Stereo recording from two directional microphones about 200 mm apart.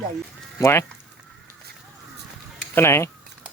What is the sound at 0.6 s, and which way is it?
Speech, 15° left (ahead or behind).